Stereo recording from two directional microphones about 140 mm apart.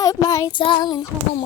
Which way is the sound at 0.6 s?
35° left (ahead or behind).